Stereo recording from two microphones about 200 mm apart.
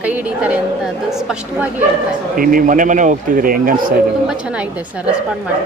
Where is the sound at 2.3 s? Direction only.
45° right (ahead or behind).